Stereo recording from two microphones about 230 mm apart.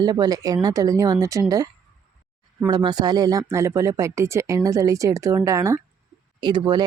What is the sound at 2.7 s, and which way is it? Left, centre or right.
Speech, centre.